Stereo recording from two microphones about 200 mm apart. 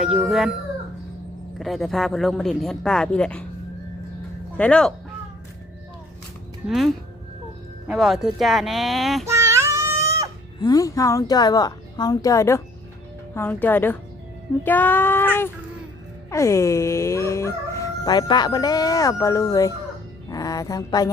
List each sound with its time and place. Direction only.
0.0 s speech: centre (ahead or behind)
1.5 s speech: centre (ahead or behind)
4.5 s speech: 5° left (ahead or behind)
6.7 s speech: centre (ahead or behind)
9.2 s a sound: 15° right (ahead or behind)
10.6 s speech: 20° left (ahead or behind)
20.3 s mantra: 15° left (ahead or behind)